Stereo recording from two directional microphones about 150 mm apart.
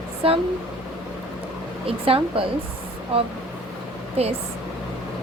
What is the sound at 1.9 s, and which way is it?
A woman's voice, 40° right (ahead or behind).